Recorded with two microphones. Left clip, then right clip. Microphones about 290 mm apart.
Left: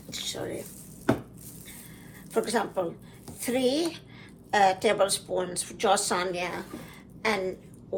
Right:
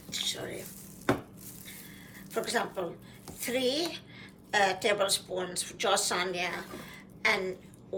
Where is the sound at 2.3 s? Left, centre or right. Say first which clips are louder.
Left 4 dB; centre.